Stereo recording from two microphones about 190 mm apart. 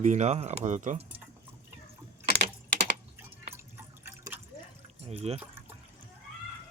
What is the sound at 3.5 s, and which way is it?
Drip, 10° right (ahead or behind).